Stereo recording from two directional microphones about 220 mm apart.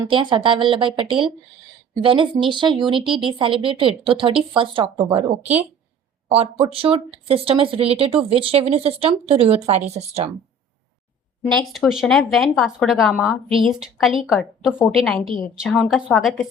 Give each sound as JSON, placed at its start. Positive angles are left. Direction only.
{"t": 0.1, "sound": "speech", "side_deg": -20}
{"t": 6.3, "sound": "speech", "side_deg": -25}
{"t": 11.5, "sound": "speech", "side_deg": 0}